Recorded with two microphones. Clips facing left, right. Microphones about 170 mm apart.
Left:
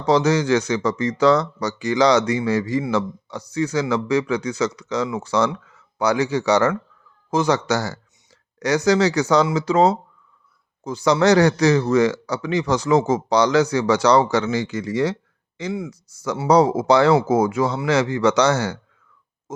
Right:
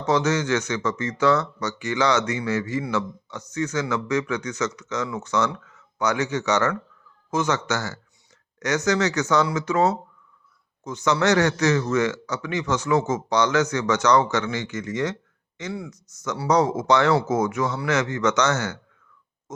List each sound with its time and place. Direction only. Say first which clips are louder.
0.0 s speech: left 4 dB; 35° left (ahead or behind)
10.8 s speech: left 5 dB; 35° left (ahead or behind)
19.5 s pig: left 4 dB; 30° left (ahead or behind)